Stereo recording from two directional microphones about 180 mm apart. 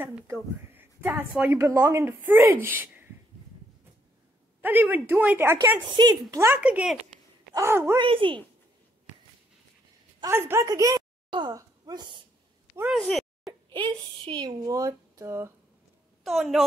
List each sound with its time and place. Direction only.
0.0 s speech: 10° right (ahead or behind)
4.6 s speech: 10° right (ahead or behind)
5.9 s speech: 25° right (ahead or behind)
8.0 s speech: 30° right (ahead or behind)
10.2 s speech: 15° right (ahead or behind)
12.7 s speech: 5° right (ahead or behind)
13.0 s a sound: centre (ahead or behind)
13.5 s speech: 25° right (ahead or behind)
16.3 s a woman's voice: centre (ahead or behind)